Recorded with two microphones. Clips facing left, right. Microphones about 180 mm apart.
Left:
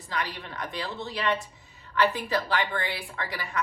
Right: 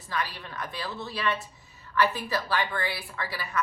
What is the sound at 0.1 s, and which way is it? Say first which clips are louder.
A woman's voice: even; 20° left (ahead or behind).